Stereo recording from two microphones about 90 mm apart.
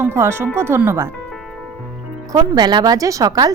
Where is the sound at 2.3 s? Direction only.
45° right (ahead or behind).